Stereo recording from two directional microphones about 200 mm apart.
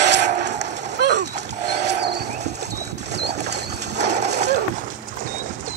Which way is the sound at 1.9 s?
55° right (ahead or behind).